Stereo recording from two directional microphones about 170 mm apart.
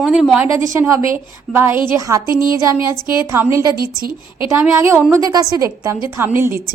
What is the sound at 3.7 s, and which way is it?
Speech, 60° right (ahead or behind).